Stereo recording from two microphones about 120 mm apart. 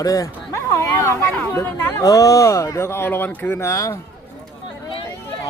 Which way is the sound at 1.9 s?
30° left (ahead or behind).